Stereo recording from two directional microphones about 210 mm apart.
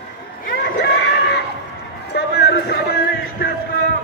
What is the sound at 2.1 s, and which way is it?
Music, 50° left (ahead or behind).